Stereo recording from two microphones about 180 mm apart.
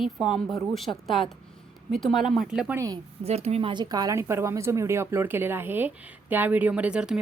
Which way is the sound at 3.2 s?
35° right (ahead or behind).